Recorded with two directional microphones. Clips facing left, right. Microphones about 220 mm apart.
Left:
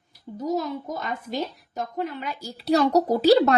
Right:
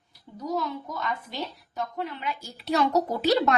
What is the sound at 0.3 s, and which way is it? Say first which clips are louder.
A child's voice: left 4 dB; 45° left (ahead or behind).